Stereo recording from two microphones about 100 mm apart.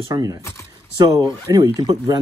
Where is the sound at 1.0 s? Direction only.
40° right (ahead or behind).